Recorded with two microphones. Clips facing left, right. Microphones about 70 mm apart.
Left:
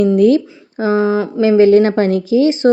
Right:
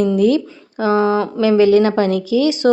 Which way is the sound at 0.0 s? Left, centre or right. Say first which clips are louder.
Left 3 dB; left.